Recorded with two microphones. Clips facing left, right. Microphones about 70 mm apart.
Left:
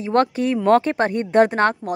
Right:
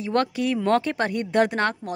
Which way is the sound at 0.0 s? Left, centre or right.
Left.